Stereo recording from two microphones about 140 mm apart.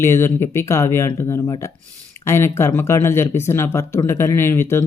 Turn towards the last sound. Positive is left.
turn(degrees=15)  # may be behind; listen again after turning